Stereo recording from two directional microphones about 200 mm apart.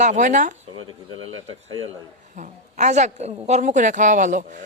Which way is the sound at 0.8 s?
90° right.